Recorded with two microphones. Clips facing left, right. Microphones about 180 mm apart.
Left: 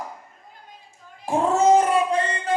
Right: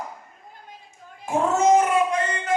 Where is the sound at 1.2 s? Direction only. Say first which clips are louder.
Left 1 dB; 35° left (ahead or behind).